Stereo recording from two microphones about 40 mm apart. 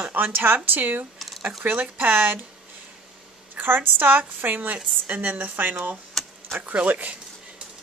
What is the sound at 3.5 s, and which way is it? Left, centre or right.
Speech, right.